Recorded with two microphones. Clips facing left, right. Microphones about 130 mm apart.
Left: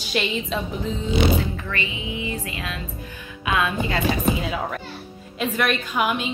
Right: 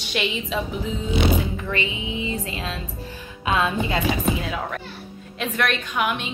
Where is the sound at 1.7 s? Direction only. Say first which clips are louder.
Right 2 dB; 20° right (ahead or behind).